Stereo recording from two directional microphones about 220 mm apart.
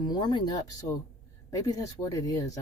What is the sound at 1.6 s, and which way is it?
Speech, 15° left (ahead or behind).